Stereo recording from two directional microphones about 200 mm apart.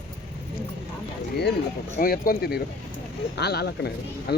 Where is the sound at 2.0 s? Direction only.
45° left (ahead or behind).